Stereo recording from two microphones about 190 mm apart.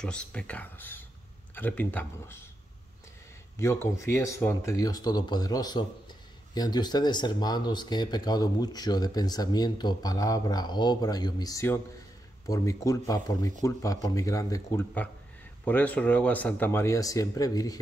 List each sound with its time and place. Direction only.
0.0 s speech: 5° left (ahead or behind)
3.5 s speech: 15° left (ahead or behind)